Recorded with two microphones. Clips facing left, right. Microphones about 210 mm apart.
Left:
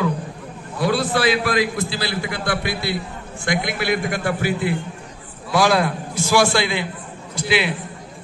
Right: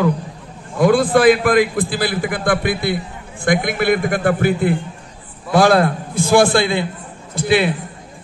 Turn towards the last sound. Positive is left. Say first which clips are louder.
# right 5 dB
turn(degrees=-50)  # may be behind; listen again after turning